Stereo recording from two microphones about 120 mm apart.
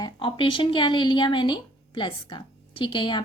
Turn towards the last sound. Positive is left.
turn(degrees=45)  # may be behind; listen again after turning